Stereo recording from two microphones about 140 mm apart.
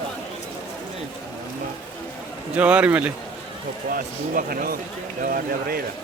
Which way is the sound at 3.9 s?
90° right.